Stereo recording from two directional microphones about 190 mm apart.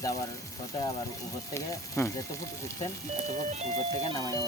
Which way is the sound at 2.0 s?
15° left (ahead or behind).